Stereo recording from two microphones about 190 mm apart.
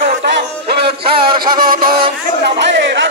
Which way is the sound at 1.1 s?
25° right (ahead or behind).